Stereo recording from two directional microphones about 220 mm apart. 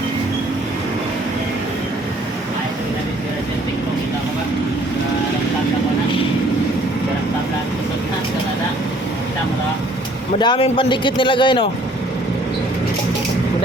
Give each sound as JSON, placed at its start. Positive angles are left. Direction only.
{"t": 10.4, "sound": "speech", "side_deg": 20}